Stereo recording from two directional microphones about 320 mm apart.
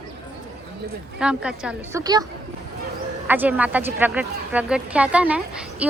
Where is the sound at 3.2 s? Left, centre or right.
Centre.